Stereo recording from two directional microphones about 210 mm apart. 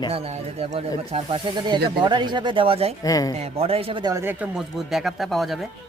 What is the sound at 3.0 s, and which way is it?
Speech, 15° left (ahead or behind).